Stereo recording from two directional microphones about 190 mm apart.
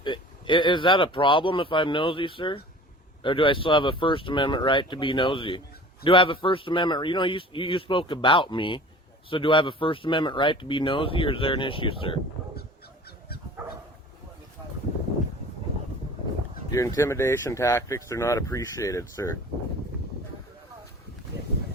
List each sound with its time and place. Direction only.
0.0 s speech: 25° left (ahead or behind)
16.7 s speech: 15° left (ahead or behind)